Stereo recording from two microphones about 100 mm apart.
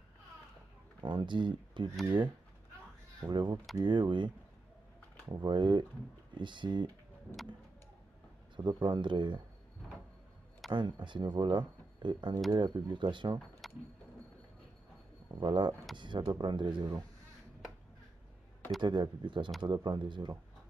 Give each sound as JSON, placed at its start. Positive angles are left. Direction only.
{"t": 1.0, "sound": "speech", "side_deg": -50}
{"t": 3.2, "sound": "speech", "side_deg": -45}
{"t": 5.3, "sound": "speech", "side_deg": -50}
{"t": 8.5, "sound": "speech", "side_deg": -50}
{"t": 10.7, "sound": "speech", "side_deg": -50}
{"t": 13.6, "sound": "vehicle", "side_deg": 0}
{"t": 15.3, "sound": "speech", "side_deg": -50}
{"t": 18.8, "sound": "speech", "side_deg": -50}